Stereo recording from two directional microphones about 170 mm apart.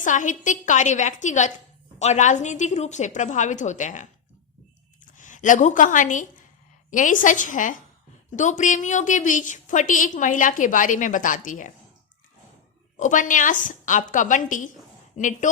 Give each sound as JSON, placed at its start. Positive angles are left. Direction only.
{"t": 0.0, "sound": "a woman's voice", "side_deg": 50}
{"t": 5.1, "sound": "a woman's voice", "side_deg": 50}
{"t": 13.0, "sound": "a woman's voice", "side_deg": 50}